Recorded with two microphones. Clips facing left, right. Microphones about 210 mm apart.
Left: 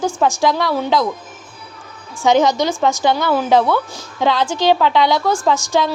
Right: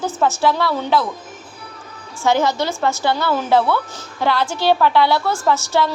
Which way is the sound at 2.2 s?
20° left (ahead or behind).